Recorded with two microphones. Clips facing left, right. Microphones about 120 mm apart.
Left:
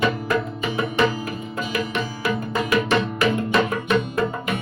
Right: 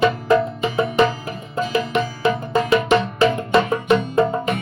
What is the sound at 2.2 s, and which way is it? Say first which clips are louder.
Music: right 5 dB; 25° right (ahead or behind).